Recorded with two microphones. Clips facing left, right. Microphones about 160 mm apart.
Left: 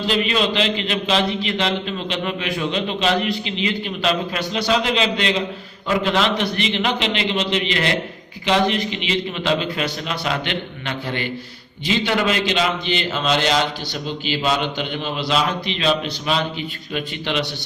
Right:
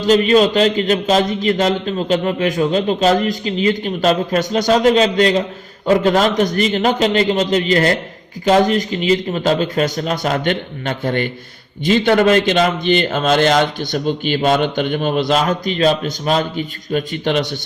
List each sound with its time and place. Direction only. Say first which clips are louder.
0.0 s a man's voice: right 8 dB; 40° right (ahead or behind)